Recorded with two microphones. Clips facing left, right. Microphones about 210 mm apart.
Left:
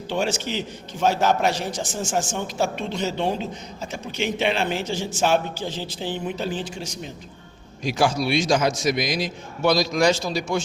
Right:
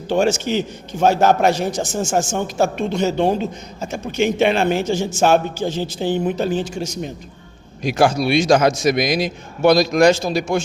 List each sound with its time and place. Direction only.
0.1 s a man's voice: 45° right (ahead or behind)
7.9 s a man's voice: 60° right (ahead or behind)